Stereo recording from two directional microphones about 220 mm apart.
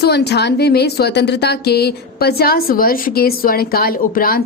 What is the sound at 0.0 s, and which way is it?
A woman's voice, 50° left (ahead or behind).